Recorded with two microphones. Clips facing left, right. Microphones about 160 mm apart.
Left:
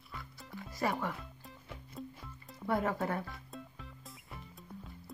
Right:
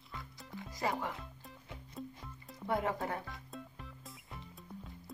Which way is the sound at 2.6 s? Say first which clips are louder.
Left 2 dB; 20° right (ahead or behind).